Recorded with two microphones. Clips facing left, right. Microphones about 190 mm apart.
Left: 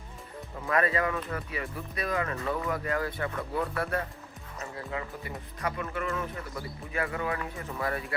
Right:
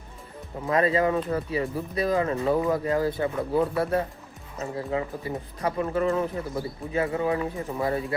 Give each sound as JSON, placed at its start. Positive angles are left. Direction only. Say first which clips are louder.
{"t": 0.7, "sound": "speech", "louder": "right 5 dB", "side_deg": -25}